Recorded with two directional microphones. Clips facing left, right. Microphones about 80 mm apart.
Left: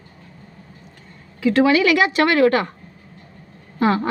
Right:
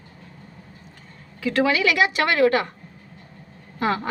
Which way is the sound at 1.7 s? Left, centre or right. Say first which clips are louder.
Left 4 dB; left.